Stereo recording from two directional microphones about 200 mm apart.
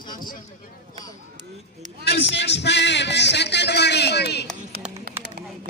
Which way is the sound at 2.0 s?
60° left (ahead or behind).